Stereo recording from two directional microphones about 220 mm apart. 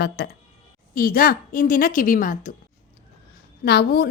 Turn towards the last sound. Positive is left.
turn(degrees=45)  # may be behind; listen again after turning